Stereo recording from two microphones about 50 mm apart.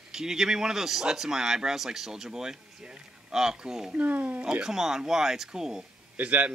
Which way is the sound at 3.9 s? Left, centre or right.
Right.